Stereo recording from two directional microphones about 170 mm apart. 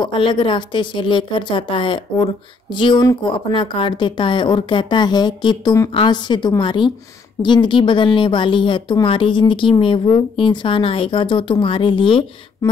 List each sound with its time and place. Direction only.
0.0 s speech: 30° left (ahead or behind)